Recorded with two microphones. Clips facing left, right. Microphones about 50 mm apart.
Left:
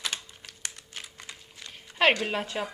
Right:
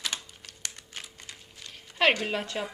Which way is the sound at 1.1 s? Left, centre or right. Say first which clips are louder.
Left 2 dB; left.